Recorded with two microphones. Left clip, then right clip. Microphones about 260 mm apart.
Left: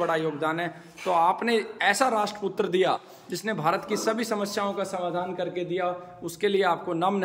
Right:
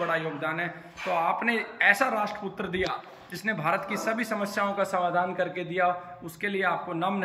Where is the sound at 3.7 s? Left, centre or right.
Left.